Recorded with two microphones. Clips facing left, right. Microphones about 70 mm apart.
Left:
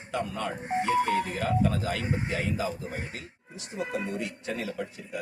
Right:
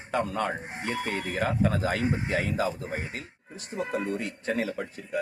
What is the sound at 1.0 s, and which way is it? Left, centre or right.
Speech, left.